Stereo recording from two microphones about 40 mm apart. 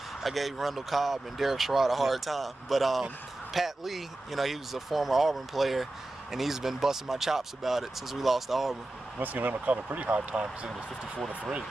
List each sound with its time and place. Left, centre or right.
0.2 s speech: centre
9.2 s speech: right
9.8 s speech: right
10.7 s speech: centre